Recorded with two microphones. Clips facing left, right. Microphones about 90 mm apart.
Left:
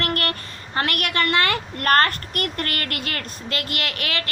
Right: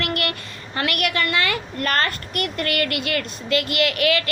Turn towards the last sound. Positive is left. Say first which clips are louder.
# right 8 dB
turn(degrees=40)  # may be behind; listen again after turning